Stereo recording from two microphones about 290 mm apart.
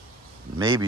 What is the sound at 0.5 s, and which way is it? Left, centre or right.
Speech, centre.